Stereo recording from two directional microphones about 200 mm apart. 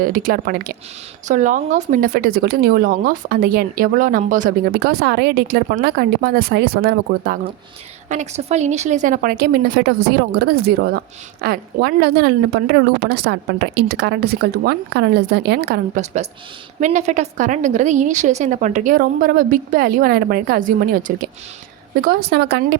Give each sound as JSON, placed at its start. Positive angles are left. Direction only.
{"t": 0.0, "sound": "speech", "side_deg": -45}
{"t": 8.1, "sound": "a woman's voice", "side_deg": -35}
{"t": 16.8, "sound": "a woman's voice", "side_deg": -35}